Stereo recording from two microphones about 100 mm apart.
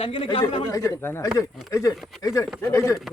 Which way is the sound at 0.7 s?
30° left (ahead or behind).